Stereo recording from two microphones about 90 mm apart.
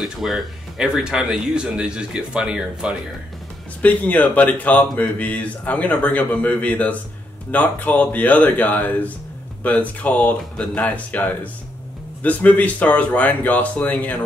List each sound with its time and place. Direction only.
0.0 s speech: 5° right (ahead or behind)
3.8 s a man's voice: 15° left (ahead or behind)